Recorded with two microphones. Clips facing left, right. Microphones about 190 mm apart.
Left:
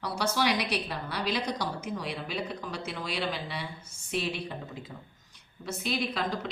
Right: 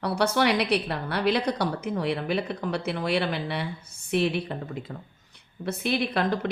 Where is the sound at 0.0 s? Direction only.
60° right (ahead or behind).